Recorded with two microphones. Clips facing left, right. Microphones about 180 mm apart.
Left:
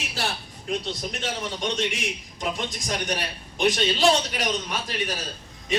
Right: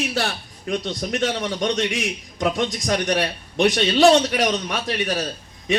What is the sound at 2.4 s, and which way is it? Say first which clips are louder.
A man's voice: right 8 dB; 75° right (ahead or behind).